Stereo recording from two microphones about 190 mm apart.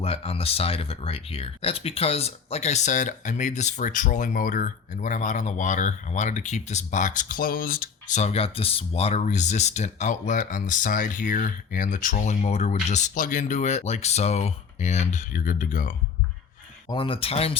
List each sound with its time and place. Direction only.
0.0 s speech: 30° left (ahead or behind)
16.9 s speech: 25° left (ahead or behind)